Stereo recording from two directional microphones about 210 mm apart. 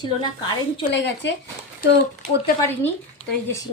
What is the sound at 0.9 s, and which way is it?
Speech, 60° left (ahead or behind).